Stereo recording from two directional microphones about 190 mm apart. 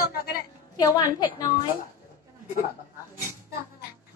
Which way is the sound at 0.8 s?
20° left (ahead or behind).